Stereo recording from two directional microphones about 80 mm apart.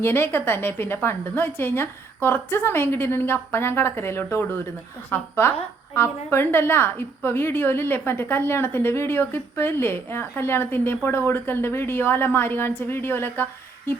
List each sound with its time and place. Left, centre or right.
0.0 s a woman's voice: left